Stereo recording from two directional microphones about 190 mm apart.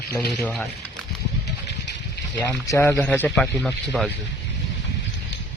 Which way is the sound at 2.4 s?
15° left (ahead or behind).